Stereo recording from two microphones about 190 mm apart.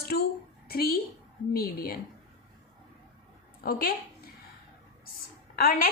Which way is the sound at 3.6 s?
50° left (ahead or behind).